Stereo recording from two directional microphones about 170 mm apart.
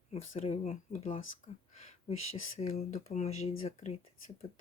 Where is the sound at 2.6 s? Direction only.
40° left (ahead or behind).